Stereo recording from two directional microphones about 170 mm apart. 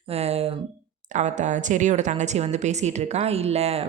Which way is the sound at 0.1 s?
35° right (ahead or behind).